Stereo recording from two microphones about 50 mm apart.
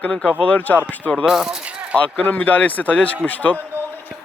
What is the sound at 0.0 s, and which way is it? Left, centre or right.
Speech, left.